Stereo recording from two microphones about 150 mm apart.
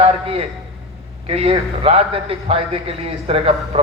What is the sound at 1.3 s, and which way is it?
A man's voice, 40° right (ahead or behind).